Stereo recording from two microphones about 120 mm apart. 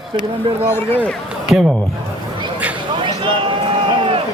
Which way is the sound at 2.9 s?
45° right (ahead or behind).